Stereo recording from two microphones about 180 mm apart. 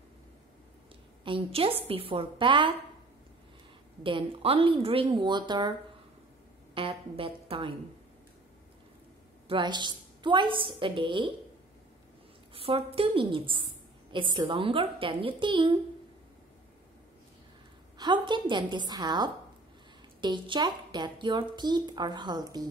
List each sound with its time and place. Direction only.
1.2 s a woman's voice: 30° right (ahead or behind)
4.0 s a woman's voice: 30° right (ahead or behind)
9.5 s speech: 25° right (ahead or behind)
12.5 s speech: 30° right (ahead or behind)
17.9 s speech: 25° right (ahead or behind)